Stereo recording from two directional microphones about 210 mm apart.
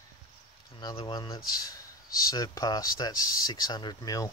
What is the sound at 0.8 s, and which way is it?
Speech, 20° left (ahead or behind).